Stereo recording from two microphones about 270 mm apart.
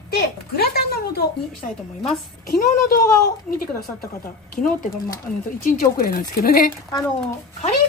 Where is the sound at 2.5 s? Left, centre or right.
Left.